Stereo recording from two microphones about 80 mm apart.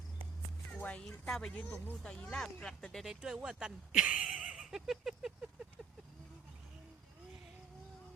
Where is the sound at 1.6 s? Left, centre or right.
Left.